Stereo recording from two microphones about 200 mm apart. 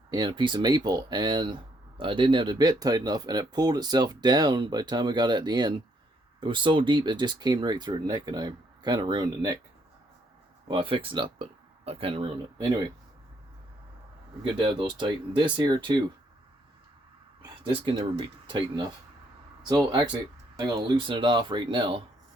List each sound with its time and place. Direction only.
0.1 s speech: 20° right (ahead or behind)
10.7 s speech: 25° right (ahead or behind)
14.4 s speech: 25° right (ahead or behind)
17.6 s speech: 25° right (ahead or behind)